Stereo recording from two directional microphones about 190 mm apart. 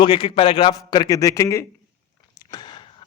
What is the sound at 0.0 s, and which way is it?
Speech, 25° left (ahead or behind).